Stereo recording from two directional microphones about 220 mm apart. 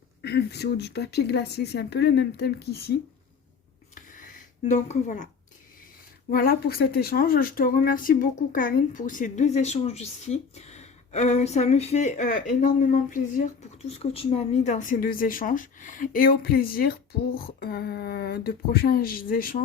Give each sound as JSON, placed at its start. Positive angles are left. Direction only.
{"t": 0.2, "sound": "a woman's voice", "side_deg": 50}
{"t": 3.9, "sound": "a sound", "side_deg": 35}
{"t": 4.7, "sound": "speech", "side_deg": 35}
{"t": 6.3, "sound": "speech", "side_deg": 45}